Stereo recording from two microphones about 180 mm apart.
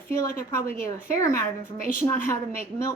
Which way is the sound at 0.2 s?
15° left (ahead or behind).